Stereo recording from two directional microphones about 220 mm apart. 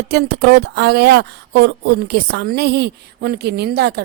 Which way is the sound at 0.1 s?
45° right (ahead or behind).